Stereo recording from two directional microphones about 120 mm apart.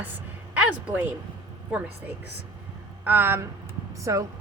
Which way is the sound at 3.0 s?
20° right (ahead or behind).